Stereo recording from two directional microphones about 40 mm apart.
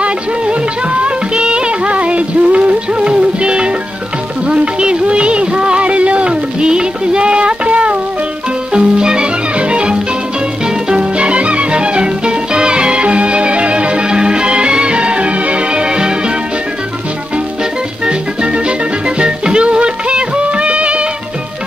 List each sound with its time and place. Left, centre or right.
0.0 s music: right
11.1 s music: right
18.0 s music: right